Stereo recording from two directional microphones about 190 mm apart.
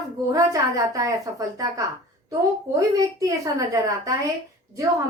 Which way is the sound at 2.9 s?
20° right (ahead or behind).